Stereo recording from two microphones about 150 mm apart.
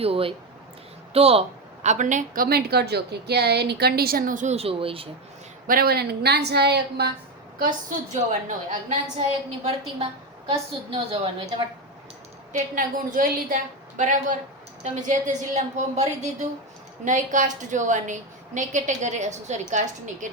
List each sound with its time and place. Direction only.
0.0 s a woman's voice: 40° right (ahead or behind)
5.6 s a woman's voice: 80° right
7.6 s a woman's voice: 60° right (ahead or behind)
10.9 s a woman's voice: 35° right (ahead or behind)
12.5 s a woman's voice: 65° right (ahead or behind)